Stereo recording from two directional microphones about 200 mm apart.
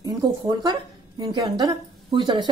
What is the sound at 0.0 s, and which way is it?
A woman's voice, 20° right (ahead or behind).